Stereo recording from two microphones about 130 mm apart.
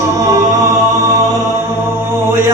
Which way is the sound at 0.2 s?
25° right (ahead or behind).